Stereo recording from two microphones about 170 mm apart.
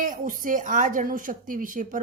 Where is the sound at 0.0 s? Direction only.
50° right (ahead or behind).